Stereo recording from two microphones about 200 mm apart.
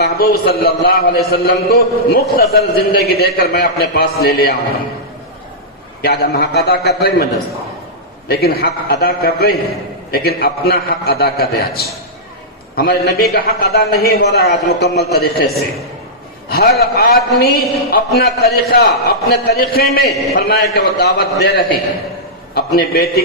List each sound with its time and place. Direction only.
0.0 s a man's voice: 50° left (ahead or behind)
6.0 s a man's voice: 50° left (ahead or behind)
8.3 s a man's voice: 50° left (ahead or behind)